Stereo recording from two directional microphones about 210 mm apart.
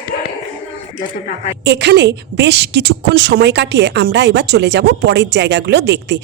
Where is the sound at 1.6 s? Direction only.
55° right (ahead or behind).